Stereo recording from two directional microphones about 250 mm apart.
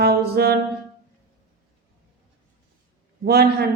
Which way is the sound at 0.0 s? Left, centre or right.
Right.